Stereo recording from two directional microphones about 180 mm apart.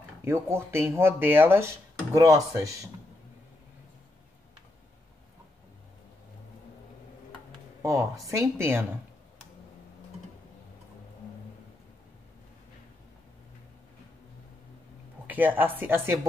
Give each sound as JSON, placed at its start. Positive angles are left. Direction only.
{"t": 0.2, "sound": "speech", "side_deg": -15}
{"t": 7.8, "sound": "speech", "side_deg": -15}
{"t": 15.2, "sound": "speech", "side_deg": -10}